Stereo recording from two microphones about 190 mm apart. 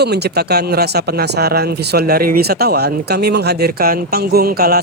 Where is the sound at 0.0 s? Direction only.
60° right (ahead or behind).